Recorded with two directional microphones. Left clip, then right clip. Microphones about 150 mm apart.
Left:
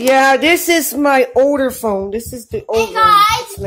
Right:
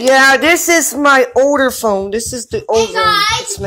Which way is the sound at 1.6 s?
Centre (ahead or behind).